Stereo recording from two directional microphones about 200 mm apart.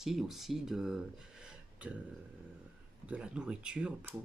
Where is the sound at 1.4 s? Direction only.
5° right (ahead or behind).